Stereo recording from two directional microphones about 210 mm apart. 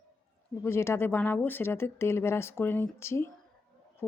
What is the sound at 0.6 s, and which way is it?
Speech, 10° left (ahead or behind).